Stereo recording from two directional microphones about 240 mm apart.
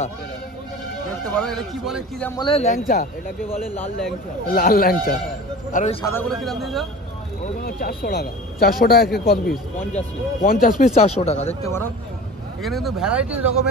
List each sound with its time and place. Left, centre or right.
1.4 s a man's voice: centre
2.3 s speech: left
3.7 s speech: centre
4.5 s speech: left
6.0 s a man's voice: centre
7.6 s speech: left
11.6 s speech: centre
12.6 s a man's voice: centre